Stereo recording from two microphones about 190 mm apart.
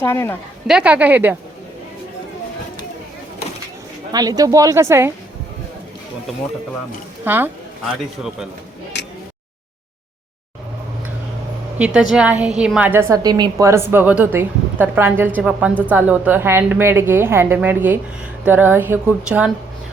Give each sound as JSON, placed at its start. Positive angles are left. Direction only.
{"t": 0.0, "sound": "speech", "side_deg": 15}
{"t": 0.7, "sound": "a woman's voice", "side_deg": -5}
{"t": 4.1, "sound": "a woman's voice", "side_deg": -20}
{"t": 7.3, "sound": "a woman's voice", "side_deg": -10}
{"t": 12.1, "sound": "a woman's voice", "side_deg": -5}